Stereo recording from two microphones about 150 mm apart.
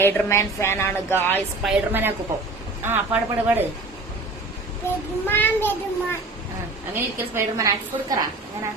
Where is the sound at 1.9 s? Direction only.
15° right (ahead or behind).